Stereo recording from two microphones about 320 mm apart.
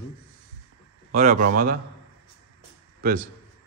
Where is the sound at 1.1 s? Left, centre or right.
Right.